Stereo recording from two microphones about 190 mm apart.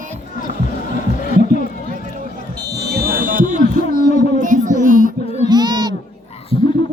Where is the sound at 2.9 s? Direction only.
55° right (ahead or behind).